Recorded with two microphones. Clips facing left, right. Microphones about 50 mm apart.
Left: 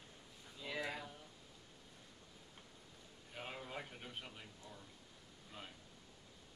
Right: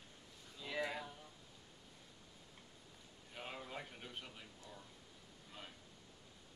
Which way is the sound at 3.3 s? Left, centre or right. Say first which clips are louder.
Left 1 dB; centre.